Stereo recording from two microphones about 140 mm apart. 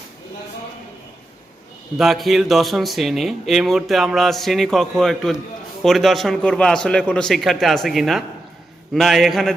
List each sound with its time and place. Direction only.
2.0 s speech: centre (ahead or behind)